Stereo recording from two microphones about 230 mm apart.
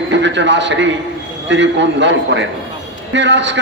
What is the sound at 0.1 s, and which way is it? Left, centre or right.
A man's voice, right.